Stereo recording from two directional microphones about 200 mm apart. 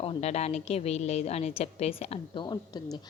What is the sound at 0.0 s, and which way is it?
A woman's voice, 30° left (ahead or behind).